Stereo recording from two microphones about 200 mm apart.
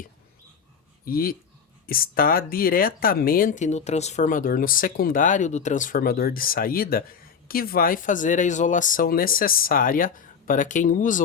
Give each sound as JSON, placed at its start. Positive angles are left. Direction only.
{"t": 1.0, "sound": "speech", "side_deg": 50}